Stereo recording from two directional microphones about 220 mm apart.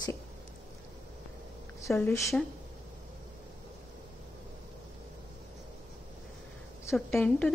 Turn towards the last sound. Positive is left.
turn(degrees=5)  # may be behind; listen again after turning